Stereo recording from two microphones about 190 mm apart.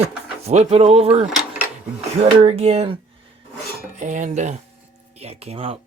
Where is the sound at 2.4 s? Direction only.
35° right (ahead or behind).